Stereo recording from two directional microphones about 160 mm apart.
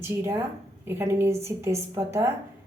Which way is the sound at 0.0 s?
15° right (ahead or behind).